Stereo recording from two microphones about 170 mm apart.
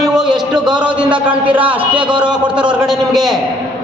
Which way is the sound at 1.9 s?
30° right (ahead or behind).